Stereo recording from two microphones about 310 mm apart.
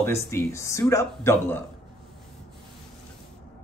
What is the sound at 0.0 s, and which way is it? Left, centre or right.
Speech, centre.